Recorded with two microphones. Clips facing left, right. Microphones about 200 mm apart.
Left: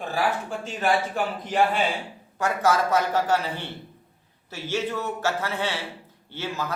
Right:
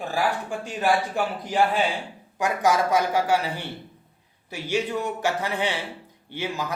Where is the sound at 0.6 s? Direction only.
10° right (ahead or behind).